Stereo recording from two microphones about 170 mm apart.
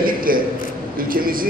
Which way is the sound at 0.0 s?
55° right (ahead or behind).